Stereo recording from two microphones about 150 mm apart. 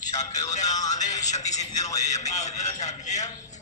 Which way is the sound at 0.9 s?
55° left (ahead or behind).